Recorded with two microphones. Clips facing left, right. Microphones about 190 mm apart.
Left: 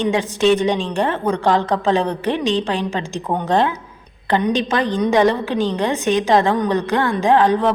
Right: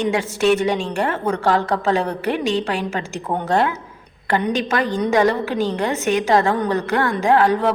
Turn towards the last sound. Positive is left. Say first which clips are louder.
# left 1 dB
turn(degrees=15)  # may be behind; listen again after turning